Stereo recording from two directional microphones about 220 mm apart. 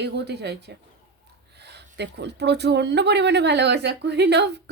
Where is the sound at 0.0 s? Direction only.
50° right (ahead or behind).